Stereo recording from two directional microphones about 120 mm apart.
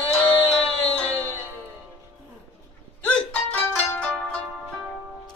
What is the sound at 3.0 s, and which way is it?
Music, 10° left (ahead or behind).